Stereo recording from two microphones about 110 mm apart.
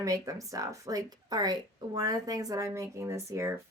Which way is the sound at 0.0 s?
30° right (ahead or behind).